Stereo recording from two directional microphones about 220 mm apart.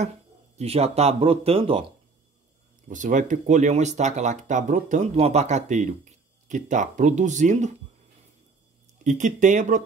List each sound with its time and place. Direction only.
0.6 s speech: 30° right (ahead or behind)
2.9 s speech: 35° right (ahead or behind)
9.0 s speech: 35° right (ahead or behind)